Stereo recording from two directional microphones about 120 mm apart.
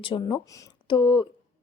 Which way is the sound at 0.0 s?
45° left (ahead or behind).